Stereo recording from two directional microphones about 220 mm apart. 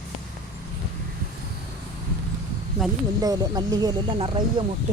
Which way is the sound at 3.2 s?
15° right (ahead or behind).